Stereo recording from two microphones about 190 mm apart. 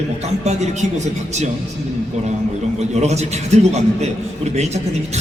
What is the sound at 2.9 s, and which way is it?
A man's voice, 35° right (ahead or behind).